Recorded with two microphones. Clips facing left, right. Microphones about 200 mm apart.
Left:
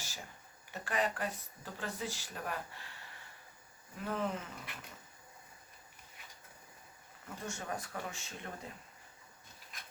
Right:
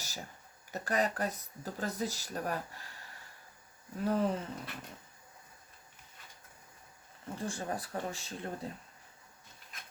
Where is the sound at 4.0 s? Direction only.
35° right (ahead or behind).